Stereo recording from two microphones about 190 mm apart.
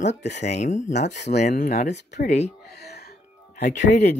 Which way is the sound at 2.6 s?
60° left (ahead or behind).